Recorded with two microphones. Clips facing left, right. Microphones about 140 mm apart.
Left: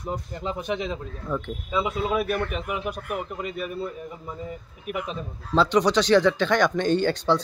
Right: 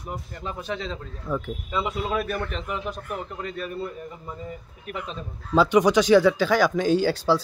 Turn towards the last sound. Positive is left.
turn(degrees=-5)  # may be behind; listen again after turning